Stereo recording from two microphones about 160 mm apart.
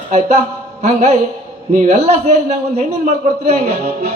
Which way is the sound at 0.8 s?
45° right (ahead or behind).